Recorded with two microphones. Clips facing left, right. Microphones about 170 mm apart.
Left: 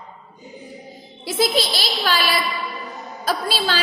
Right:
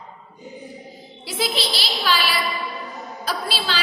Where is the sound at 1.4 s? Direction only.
45° left (ahead or behind).